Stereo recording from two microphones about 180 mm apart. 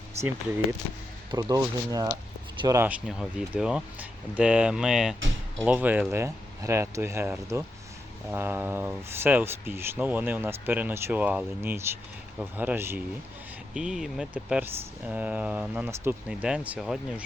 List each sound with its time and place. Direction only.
1.3 s speech: 20° right (ahead or behind)
3.1 s speech: 5° right (ahead or behind)